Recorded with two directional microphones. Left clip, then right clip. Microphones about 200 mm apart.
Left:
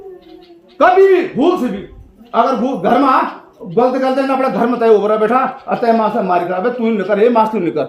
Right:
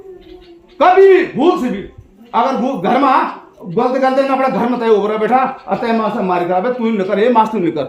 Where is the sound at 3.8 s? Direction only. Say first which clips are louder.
Even; 10° right (ahead or behind).